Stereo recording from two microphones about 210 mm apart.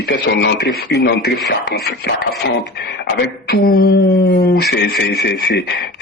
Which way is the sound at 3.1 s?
50° left (ahead or behind).